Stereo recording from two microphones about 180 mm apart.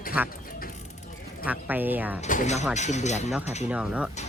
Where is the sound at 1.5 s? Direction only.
10° right (ahead or behind).